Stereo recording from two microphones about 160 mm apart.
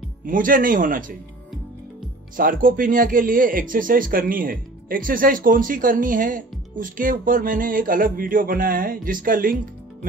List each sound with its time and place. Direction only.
0.3 s speech: 60° right (ahead or behind)
2.3 s speech: 60° right (ahead or behind)